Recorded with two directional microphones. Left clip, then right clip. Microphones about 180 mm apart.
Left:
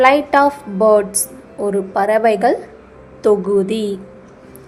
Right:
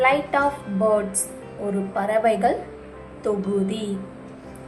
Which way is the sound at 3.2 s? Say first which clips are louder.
Left 10 dB; 40° left (ahead or behind).